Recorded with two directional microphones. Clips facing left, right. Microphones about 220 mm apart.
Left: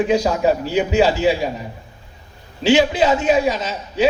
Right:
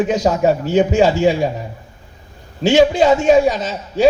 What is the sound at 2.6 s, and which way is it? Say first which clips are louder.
Speech: right 3 dB; 45° right (ahead or behind).